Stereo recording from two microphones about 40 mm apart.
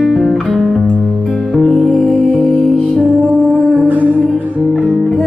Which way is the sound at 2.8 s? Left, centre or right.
Left.